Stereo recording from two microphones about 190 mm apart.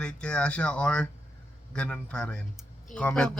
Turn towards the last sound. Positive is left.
turn(degrees=5)  # may be behind; listen again after turning